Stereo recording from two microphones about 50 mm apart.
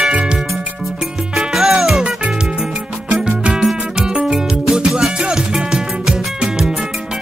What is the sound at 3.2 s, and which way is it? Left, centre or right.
Music, centre.